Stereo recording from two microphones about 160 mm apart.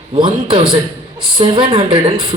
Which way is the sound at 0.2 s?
30° right (ahead or behind).